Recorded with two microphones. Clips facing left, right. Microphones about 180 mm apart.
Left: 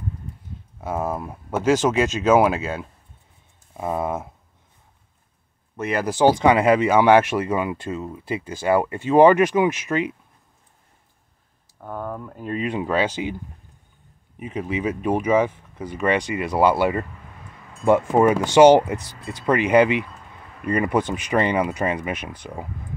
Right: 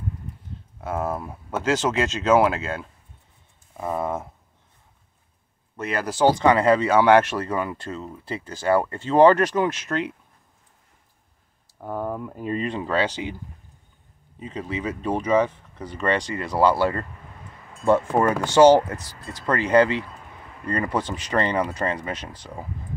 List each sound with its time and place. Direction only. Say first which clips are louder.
0.7 s speech: left 1 dB; 15° left (ahead or behind)
5.8 s speech: left 2 dB; 15° left (ahead or behind)
11.8 s speech: right 2 dB; 10° right (ahead or behind)
12.6 s speech: left 3 dB; 10° left (ahead or behind)
14.4 s speech: left 4 dB; 15° left (ahead or behind)